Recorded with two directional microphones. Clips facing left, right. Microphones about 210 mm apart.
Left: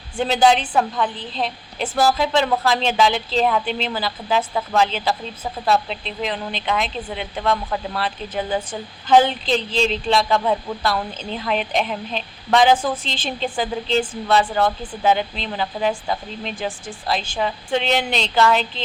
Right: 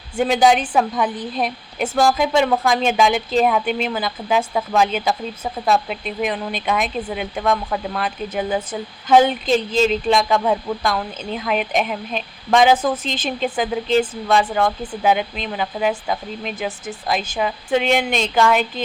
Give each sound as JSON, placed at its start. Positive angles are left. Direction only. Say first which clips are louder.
{"t": 0.2, "sound": "a woman's voice", "louder": "right 1 dB", "side_deg": -10}
{"t": 9.0, "sound": "a woman's voice", "louder": "right 1 dB", "side_deg": -10}
{"t": 14.0, "sound": "speech", "louder": "right 2 dB", "side_deg": -20}
{"t": 14.8, "sound": "a woman's voice", "louder": "right 1 dB", "side_deg": -10}